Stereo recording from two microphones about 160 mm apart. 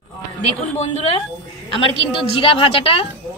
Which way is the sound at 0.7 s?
45° left (ahead or behind).